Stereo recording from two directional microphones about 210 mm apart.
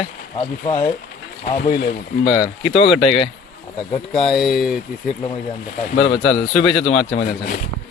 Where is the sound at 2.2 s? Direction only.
20° left (ahead or behind).